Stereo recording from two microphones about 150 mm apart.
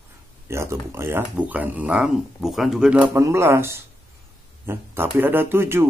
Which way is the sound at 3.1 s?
20° right (ahead or behind).